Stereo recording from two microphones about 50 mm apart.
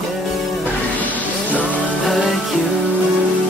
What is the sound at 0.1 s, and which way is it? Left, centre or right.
Music, centre.